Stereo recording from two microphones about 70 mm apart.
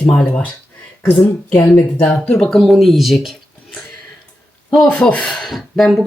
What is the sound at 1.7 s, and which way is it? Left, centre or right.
Speech, centre.